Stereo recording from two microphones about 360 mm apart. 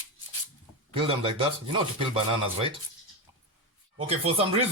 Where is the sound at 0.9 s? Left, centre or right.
Centre.